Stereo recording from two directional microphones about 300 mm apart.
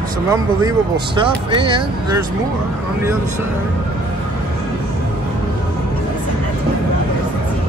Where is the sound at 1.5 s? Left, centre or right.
Centre.